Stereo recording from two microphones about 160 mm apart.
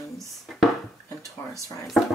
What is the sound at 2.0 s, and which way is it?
Speech, centre (ahead or behind).